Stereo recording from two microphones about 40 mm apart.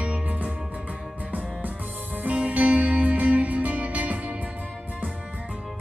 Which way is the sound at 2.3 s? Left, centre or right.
Right.